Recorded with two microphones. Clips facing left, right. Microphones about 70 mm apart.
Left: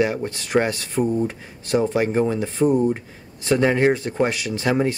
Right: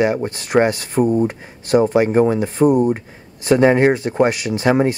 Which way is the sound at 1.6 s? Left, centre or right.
Right.